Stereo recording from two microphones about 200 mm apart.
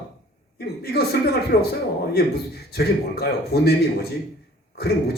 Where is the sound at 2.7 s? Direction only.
50° left (ahead or behind).